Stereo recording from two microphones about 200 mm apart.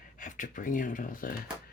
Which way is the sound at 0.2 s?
40° left (ahead or behind).